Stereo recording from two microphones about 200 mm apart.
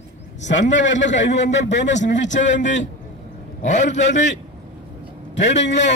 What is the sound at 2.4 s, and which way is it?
Speech, 65° left (ahead or behind).